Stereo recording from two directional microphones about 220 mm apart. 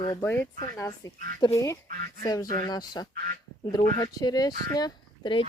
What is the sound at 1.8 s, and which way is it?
Speech, 40° right (ahead or behind).